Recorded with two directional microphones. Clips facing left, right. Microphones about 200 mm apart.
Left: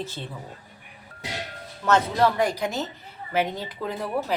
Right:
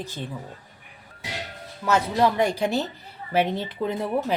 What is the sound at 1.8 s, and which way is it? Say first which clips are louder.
Speech: even; 10° right (ahead or behind).